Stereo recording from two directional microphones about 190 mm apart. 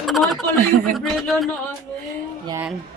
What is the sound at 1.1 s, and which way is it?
Speech, centre (ahead or behind).